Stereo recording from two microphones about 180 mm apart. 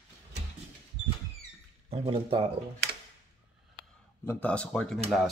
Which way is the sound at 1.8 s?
30° right (ahead or behind).